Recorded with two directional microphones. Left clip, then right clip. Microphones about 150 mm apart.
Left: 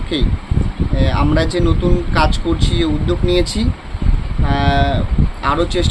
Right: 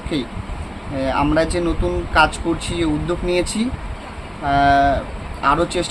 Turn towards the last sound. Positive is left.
turn(degrees=-15)  # may be behind; listen again after turning